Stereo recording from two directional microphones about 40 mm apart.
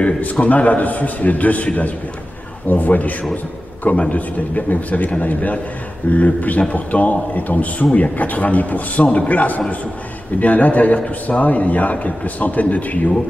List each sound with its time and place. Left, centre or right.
0.4 s a man's voice: left